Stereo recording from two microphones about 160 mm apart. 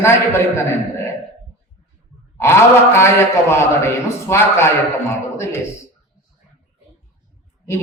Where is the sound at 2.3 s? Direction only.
15° left (ahead or behind).